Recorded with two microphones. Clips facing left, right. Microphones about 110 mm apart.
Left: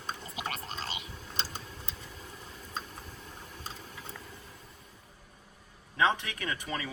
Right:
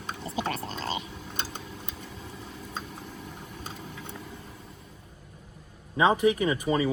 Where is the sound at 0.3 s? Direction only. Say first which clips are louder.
Right 7 dB; 30° right (ahead or behind).